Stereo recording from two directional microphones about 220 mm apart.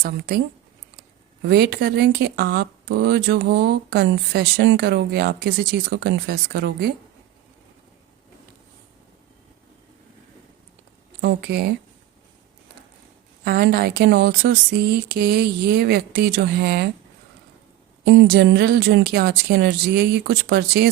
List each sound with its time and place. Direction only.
0.0 s speech: 45° right (ahead or behind)
11.2 s speech: 50° right (ahead or behind)
13.4 s speech: 45° right (ahead or behind)
18.0 s speech: 45° right (ahead or behind)